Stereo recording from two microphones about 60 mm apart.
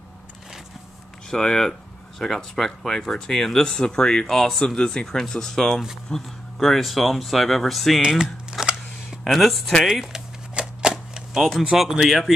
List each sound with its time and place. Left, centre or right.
1.3 s speech: centre
8.0 s typing: centre
9.2 s speech: centre
9.8 s speech: centre
10.5 s a sound: centre